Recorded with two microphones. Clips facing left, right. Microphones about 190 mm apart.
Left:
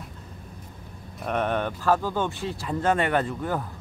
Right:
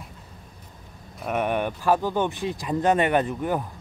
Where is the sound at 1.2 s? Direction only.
10° right (ahead or behind).